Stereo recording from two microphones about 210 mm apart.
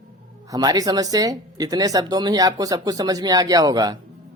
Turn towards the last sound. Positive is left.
turn(degrees=-20)  # may be behind; listen again after turning